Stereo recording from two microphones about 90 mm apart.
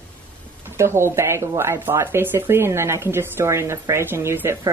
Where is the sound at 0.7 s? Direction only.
30° right (ahead or behind).